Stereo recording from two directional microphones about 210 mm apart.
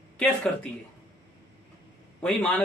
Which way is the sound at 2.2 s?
5° left (ahead or behind).